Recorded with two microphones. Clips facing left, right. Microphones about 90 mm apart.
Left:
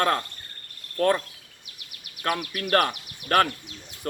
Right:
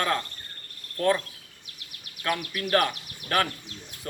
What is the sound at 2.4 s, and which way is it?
Speech, 50° left (ahead or behind).